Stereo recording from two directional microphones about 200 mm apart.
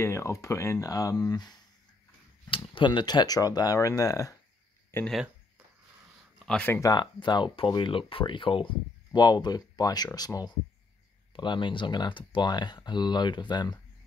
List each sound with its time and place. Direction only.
0.0 s speech: 15° left (ahead or behind)
2.5 s speech: 25° left (ahead or behind)
4.9 s speech: 5° left (ahead or behind)
6.4 s speech: 5° left (ahead or behind); by 13.7 s 20° left (ahead or behind)